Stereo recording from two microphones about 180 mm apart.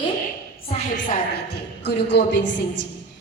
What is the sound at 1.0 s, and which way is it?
A woman's voice, 55° left (ahead or behind).